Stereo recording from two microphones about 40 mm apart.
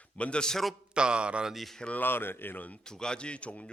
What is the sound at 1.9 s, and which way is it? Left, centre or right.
Speech, left.